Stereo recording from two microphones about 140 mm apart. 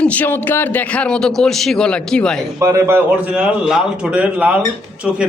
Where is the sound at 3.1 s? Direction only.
10° right (ahead or behind).